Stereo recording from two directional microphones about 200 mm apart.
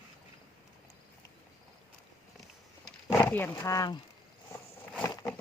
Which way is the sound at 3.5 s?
20° left (ahead or behind).